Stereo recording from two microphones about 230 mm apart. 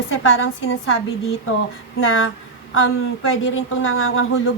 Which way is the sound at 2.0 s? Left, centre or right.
Left.